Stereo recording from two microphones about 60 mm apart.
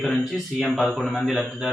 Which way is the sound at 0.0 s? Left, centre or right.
Centre.